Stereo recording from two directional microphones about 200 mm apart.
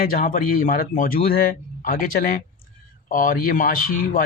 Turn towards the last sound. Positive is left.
turn(degrees=45)  # may be behind; listen again after turning